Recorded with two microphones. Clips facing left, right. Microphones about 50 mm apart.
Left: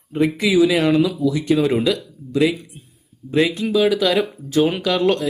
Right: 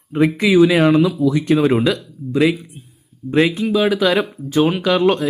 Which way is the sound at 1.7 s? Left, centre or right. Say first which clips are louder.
Right 2 dB; centre.